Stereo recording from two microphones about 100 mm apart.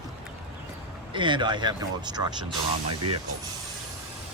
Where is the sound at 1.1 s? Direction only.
50° right (ahead or behind).